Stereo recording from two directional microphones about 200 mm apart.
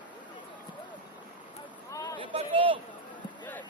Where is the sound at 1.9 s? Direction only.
15° left (ahead or behind).